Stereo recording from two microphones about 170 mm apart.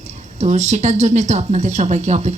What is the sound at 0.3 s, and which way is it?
A woman's voice, 40° right (ahead or behind).